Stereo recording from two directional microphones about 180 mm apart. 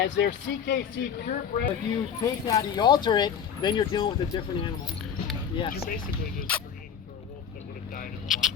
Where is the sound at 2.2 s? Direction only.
20° left (ahead or behind).